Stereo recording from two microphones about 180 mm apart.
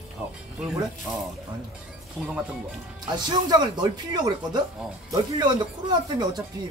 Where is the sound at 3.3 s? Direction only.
25° right (ahead or behind).